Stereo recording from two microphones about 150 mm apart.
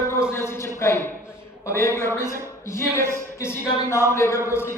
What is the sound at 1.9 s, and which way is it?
A man's voice, 15° left (ahead or behind).